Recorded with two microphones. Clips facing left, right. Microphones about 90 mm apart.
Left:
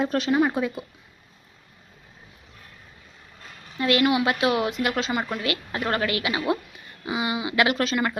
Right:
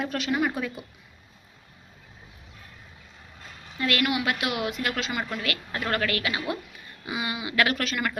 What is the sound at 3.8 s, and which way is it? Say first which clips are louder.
A woman's voice: left 5 dB; 20° left (ahead or behind).